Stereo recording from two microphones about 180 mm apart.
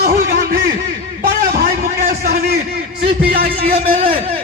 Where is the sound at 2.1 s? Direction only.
45° right (ahead or behind).